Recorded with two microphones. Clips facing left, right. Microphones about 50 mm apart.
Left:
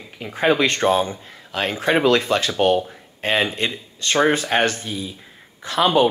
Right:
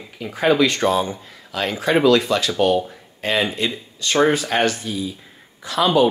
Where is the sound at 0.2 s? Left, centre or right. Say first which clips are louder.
Right 1 dB; left.